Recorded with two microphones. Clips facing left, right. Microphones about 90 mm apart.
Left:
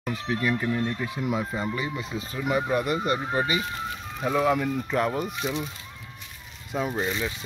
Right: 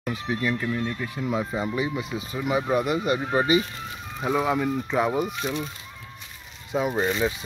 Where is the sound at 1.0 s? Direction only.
10° left (ahead or behind).